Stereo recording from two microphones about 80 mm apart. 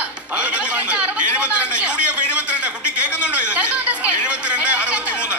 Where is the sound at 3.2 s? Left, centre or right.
Centre.